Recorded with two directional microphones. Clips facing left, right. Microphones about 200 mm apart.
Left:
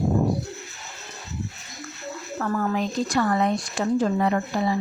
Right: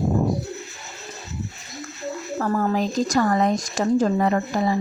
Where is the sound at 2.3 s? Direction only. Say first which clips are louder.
Right 3 dB; 35° right (ahead or behind).